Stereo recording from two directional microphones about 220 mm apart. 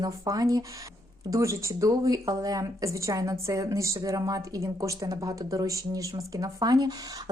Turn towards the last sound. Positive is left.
turn(degrees=-15)  # may be behind; listen again after turning